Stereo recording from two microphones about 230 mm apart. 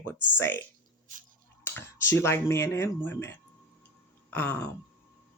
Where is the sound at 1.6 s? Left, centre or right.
Centre.